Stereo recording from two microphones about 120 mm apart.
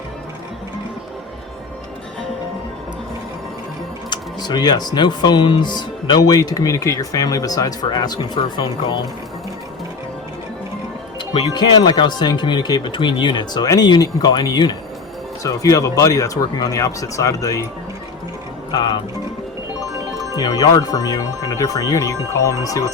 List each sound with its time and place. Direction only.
4.1 s speech: 35° left (ahead or behind)
11.5 s speech: 35° left (ahead or behind)
20.3 s speech: 30° left (ahead or behind)